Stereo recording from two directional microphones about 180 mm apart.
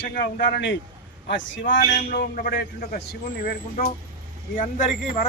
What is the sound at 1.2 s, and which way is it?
Speech, 90° left.